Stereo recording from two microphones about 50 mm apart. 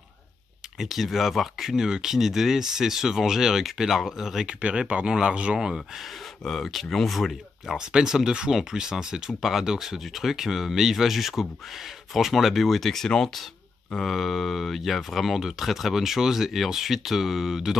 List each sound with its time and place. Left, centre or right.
0.7 s speech: centre
4.6 s speech: right
6.4 s speech: centre
7.7 s speech: centre